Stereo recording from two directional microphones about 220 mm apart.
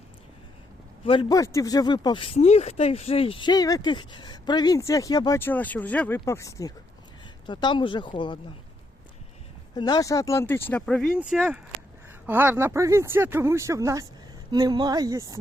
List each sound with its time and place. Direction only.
1.0 s speech: 20° left (ahead or behind)
9.7 s speech: 20° left (ahead or behind); by 15.4 s 15° right (ahead or behind)